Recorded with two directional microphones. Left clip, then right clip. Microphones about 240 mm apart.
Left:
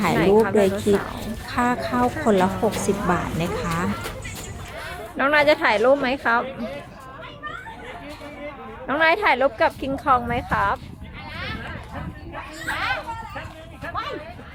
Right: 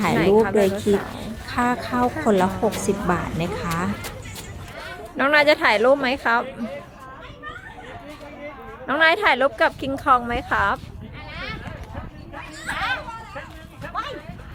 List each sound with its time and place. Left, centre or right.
0.0 s a woman's voice: centre
5.1 s a woman's voice: centre
8.9 s a woman's voice: centre
14.0 s a sound: right